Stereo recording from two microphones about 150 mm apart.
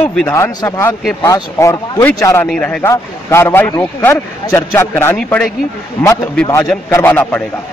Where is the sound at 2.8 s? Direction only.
20° left (ahead or behind).